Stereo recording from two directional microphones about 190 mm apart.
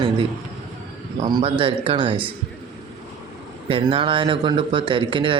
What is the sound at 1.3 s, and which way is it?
Speech, 25° right (ahead or behind).